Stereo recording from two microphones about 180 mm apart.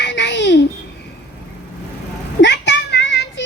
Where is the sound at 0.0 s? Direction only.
75° left (ahead or behind).